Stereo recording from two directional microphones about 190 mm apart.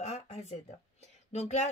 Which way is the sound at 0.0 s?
35° left (ahead or behind).